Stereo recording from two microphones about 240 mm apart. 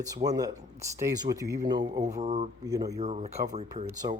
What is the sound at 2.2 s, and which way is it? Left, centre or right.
Speech, right.